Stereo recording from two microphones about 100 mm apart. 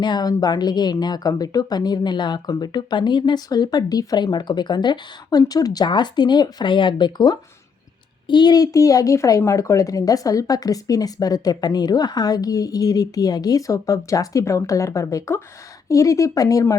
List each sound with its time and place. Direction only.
0.0 s speech: 45° left (ahead or behind)